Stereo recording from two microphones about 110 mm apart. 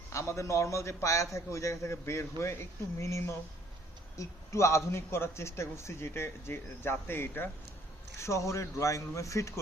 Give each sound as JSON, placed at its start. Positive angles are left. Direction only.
{"t": 0.1, "sound": "a man's voice", "side_deg": 25}